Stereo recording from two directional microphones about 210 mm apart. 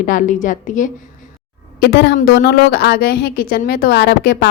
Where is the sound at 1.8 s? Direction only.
50° left (ahead or behind).